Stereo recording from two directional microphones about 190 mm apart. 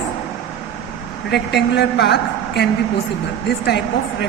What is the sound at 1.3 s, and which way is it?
A woman's voice, 60° left (ahead or behind).